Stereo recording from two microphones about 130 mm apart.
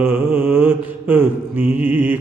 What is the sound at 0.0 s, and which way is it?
Mantra, 15° right (ahead or behind).